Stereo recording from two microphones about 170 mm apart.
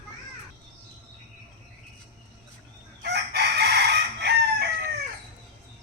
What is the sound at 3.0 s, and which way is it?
Chicken, 70° right (ahead or behind).